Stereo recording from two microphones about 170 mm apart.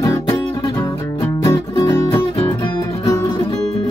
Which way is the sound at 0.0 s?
20° left (ahead or behind).